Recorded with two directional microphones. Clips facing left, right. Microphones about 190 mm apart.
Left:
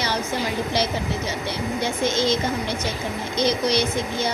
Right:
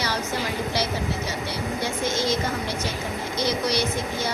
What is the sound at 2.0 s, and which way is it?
Speech, 20° left (ahead or behind).